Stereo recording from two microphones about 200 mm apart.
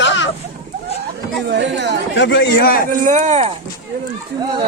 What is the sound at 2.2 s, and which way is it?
Speech, 60° left (ahead or behind).